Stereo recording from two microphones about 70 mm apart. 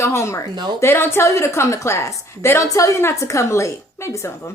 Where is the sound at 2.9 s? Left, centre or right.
Left.